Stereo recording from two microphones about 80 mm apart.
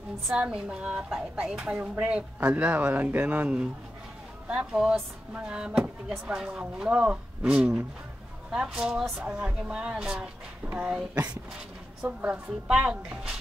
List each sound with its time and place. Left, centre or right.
0.3 s speech: centre
8.7 s speech: centre